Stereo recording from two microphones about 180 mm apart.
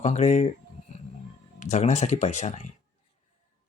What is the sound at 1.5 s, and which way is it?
Speech, 40° left (ahead or behind).